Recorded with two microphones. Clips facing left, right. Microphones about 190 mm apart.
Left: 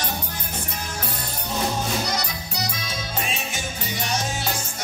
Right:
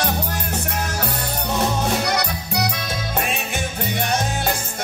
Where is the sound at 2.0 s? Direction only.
65° right (ahead or behind).